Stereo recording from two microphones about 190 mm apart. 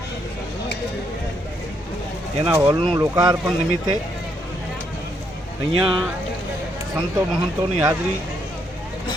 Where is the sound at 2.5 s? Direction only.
20° right (ahead or behind).